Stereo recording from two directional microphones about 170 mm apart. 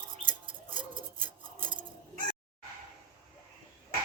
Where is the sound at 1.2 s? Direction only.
10° right (ahead or behind).